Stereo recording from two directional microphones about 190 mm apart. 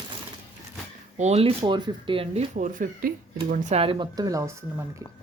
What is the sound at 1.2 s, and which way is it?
Speech, 35° right (ahead or behind).